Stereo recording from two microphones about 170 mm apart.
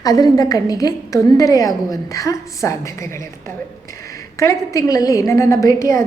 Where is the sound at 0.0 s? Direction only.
20° left (ahead or behind).